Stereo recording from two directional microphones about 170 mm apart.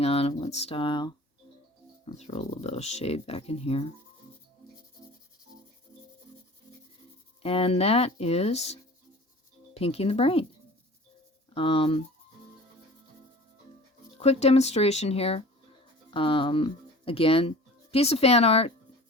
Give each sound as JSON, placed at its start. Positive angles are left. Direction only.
{"t": 0.0, "sound": "speech", "side_deg": 35}
{"t": 2.0, "sound": "speech", "side_deg": 40}
{"t": 7.4, "sound": "speech", "side_deg": 35}
{"t": 11.5, "sound": "speech", "side_deg": 30}
{"t": 14.2, "sound": "speech", "side_deg": 40}